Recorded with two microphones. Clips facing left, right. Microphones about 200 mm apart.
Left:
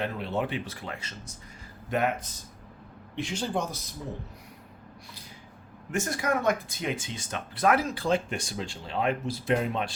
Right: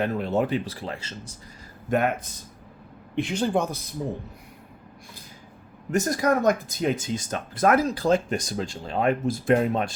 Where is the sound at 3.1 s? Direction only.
60° right (ahead or behind).